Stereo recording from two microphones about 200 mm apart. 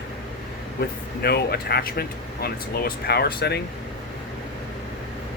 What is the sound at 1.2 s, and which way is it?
Speech, 55° left (ahead or behind).